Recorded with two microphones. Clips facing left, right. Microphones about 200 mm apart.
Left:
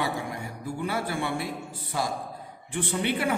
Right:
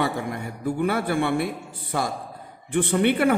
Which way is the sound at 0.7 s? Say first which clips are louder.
Right 7 dB; 60° right (ahead or behind).